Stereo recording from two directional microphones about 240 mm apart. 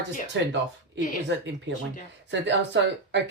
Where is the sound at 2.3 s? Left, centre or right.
Right.